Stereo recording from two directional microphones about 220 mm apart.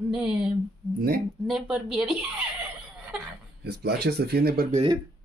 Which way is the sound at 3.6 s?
50° right (ahead or behind).